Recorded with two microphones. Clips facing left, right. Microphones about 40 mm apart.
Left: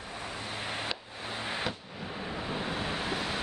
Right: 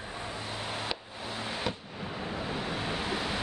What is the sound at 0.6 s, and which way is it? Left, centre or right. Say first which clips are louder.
Chop: even; centre.